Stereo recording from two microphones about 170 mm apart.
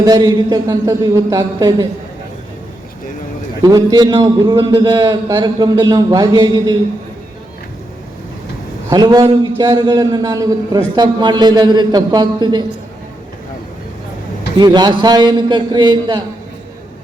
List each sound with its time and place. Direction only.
0.0 s a man's voice: 25° right (ahead or behind)
3.6 s a man's voice: 20° right (ahead or behind)
8.9 s a man's voice: 25° right (ahead or behind)
14.6 s a man's voice: 25° right (ahead or behind)